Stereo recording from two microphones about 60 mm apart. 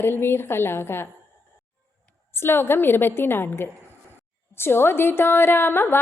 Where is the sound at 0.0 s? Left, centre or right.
Left.